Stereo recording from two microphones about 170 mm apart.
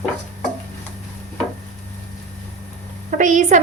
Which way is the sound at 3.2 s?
45° right (ahead or behind).